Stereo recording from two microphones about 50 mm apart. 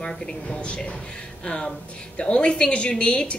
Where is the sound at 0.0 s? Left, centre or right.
Centre.